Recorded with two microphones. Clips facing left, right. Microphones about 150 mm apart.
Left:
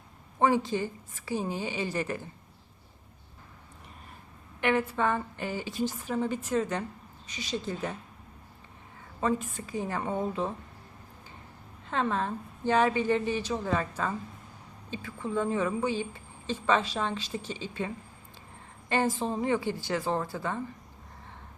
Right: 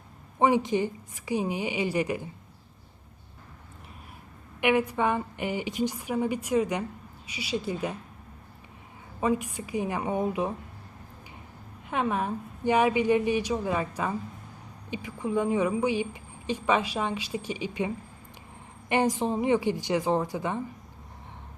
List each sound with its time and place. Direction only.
0.3 s a woman's voice: 15° right (ahead or behind)
4.6 s a woman's voice: 15° right (ahead or behind)
9.2 s a woman's voice: 15° right (ahead or behind)
11.9 s a woman's voice: 15° right (ahead or behind)